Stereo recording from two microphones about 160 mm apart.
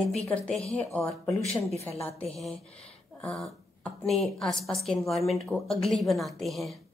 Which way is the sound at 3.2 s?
5° left (ahead or behind).